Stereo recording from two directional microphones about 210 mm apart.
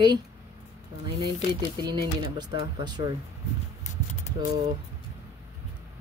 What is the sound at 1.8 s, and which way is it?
Speech, 20° right (ahead or behind).